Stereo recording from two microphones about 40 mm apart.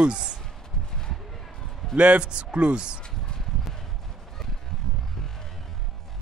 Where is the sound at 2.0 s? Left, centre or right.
Right.